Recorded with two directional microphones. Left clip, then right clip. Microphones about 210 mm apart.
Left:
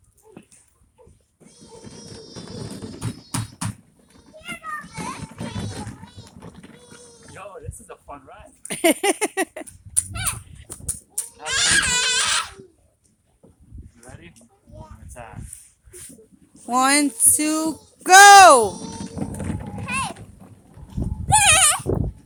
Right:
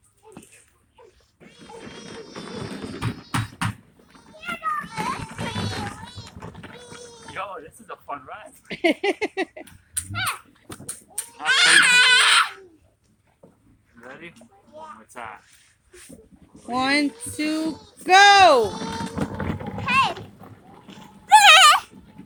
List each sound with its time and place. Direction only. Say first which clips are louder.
2.0 s music: right 2 dB; 20° left (ahead or behind)
4.1 s music: right 3 dB; 10° left (ahead or behind)
7.3 s music: right 6 dB; 25° left (ahead or behind)
8.0 s speech: right 8 dB; 10° left (ahead or behind)
9.9 s livestock: right 3 dB; 60° left (ahead or behind)
11.5 s baby cry: right 5 dB; 55° left (ahead or behind)
14.8 s a sound: right 5 dB; 10° left (ahead or behind)
16.6 s child singing: left 3 dB; 15° left (ahead or behind)
19.8 s clip-clop: right 7 dB; centre (ahead or behind)
20.4 s boat: right 4 dB; 15° left (ahead or behind)
21.2 s horse: right 6 dB; 10° left (ahead or behind)